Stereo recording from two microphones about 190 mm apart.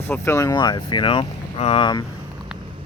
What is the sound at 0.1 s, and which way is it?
Speech, 15° left (ahead or behind).